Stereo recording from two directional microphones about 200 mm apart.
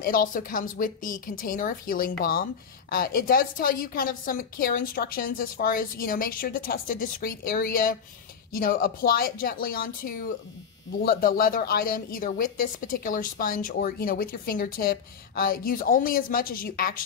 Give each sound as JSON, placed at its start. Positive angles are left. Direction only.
{"t": 0.0, "sound": "a woman's voice", "side_deg": 45}